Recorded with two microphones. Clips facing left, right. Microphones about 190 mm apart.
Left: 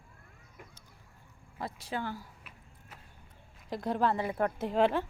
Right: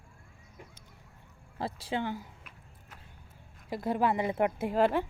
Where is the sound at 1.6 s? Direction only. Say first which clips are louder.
Right 4 dB; 30° right (ahead or behind).